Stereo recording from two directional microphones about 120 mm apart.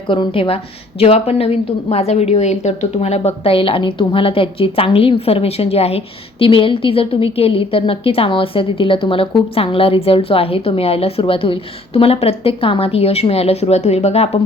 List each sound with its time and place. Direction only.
0.1 s a woman's voice: 45° left (ahead or behind); by 14.3 s 60° left (ahead or behind)